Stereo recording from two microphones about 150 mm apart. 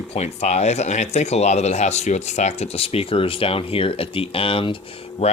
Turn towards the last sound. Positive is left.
turn(degrees=40)  # may be behind; listen again after turning